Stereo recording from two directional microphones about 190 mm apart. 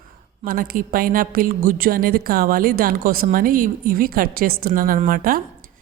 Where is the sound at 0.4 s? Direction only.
50° right (ahead or behind).